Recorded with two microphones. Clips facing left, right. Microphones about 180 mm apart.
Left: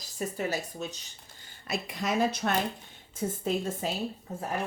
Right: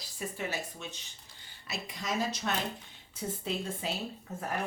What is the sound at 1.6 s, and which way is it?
A woman's voice, 55° left (ahead or behind).